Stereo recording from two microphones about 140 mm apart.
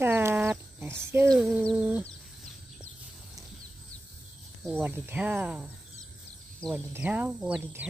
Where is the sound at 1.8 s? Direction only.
10° right (ahead or behind).